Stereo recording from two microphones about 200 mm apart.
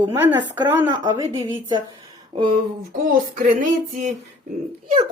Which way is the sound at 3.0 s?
40° right (ahead or behind).